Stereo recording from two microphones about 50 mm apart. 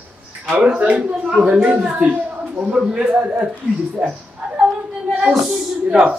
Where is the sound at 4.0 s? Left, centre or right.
Right.